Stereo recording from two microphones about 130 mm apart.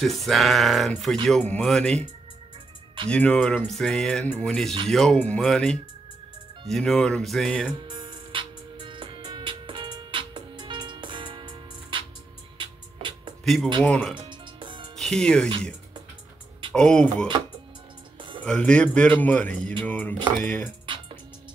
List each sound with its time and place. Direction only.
0.0 s speech: centre (ahead or behind)
3.1 s a man's voice: 10° left (ahead or behind)
7.9 s music: 35° right (ahead or behind)
13.4 s a sound: centre (ahead or behind)
14.6 s music: 40° right (ahead or behind)
15.0 s speech: 5° left (ahead or behind)
16.7 s a man's voice: 5° left (ahead or behind)
18.4 s a man's voice: 10° left (ahead or behind)